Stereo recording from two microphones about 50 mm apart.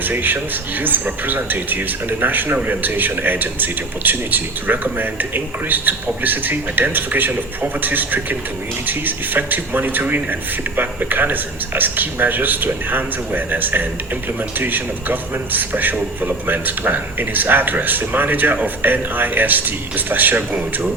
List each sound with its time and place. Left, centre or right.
0.0 s speech: right